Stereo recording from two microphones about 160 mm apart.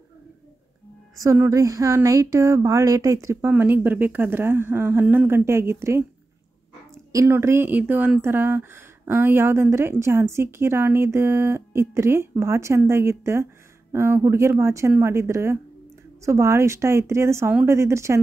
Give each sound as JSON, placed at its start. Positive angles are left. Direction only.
{"t": 1.2, "sound": "speech", "side_deg": -20}
{"t": 7.1, "sound": "speech", "side_deg": -20}